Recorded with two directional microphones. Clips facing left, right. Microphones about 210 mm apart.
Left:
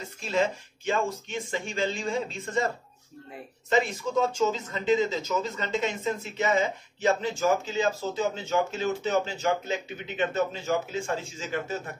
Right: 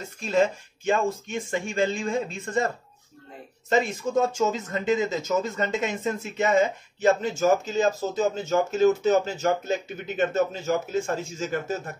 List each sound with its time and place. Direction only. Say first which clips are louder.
0.2 s speech: right 4 dB; 45° right (ahead or behind)
3.7 s speech: right 2 dB; 45° right (ahead or behind)